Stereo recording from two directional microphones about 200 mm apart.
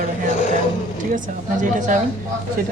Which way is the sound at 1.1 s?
40° right (ahead or behind).